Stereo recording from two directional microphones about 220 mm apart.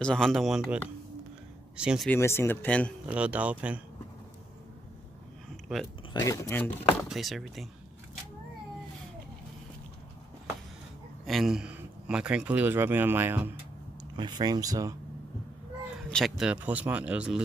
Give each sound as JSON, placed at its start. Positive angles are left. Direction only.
{"t": 0.0, "sound": "speech", "side_deg": 5}
{"t": 1.8, "sound": "speech", "side_deg": -5}
{"t": 2.0, "sound": "a man's voice", "side_deg": 10}
{"t": 3.1, "sound": "speech", "side_deg": -5}
{"t": 5.7, "sound": "speech", "side_deg": 0}
{"t": 6.2, "sound": "a man's voice", "side_deg": 15}
{"t": 7.1, "sound": "speech", "side_deg": 0}
{"t": 11.2, "sound": "speech", "side_deg": 0}
{"t": 16.1, "sound": "speech", "side_deg": 0}